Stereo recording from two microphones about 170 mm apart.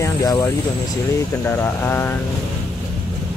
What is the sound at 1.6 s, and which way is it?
Speech, 10° left (ahead or behind).